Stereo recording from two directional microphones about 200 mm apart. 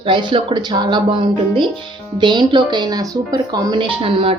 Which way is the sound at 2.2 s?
20° right (ahead or behind).